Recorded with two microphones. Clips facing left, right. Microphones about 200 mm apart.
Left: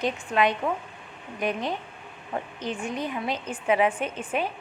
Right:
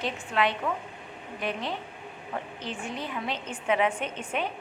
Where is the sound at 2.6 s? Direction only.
15° left (ahead or behind).